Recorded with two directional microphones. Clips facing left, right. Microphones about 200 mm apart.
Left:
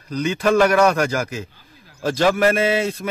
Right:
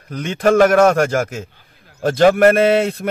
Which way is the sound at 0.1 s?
50° right (ahead or behind).